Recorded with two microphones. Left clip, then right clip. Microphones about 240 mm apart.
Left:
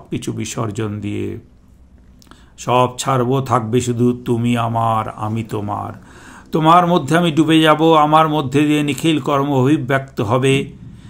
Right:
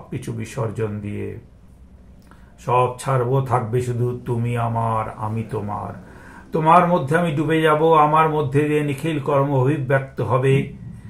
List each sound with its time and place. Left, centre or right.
0.2 s speech: left
2.6 s speech: left